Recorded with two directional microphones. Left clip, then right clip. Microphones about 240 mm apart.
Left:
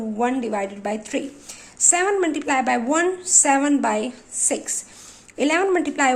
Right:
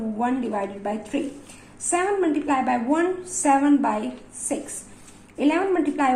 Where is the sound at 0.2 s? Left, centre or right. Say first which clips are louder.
Left 3 dB; left.